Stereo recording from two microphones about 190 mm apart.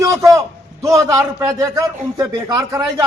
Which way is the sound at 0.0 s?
15° right (ahead or behind).